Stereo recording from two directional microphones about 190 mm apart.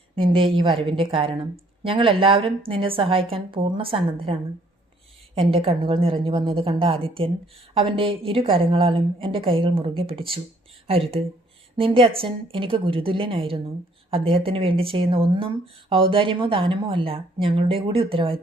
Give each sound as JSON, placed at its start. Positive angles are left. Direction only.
{"t": 0.2, "sound": "a woman's voice", "side_deg": -25}